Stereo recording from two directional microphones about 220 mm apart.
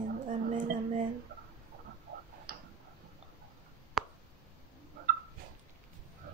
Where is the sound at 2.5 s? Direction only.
40° right (ahead or behind).